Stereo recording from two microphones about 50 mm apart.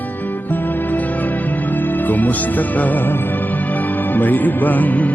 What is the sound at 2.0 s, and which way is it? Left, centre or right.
Music, left.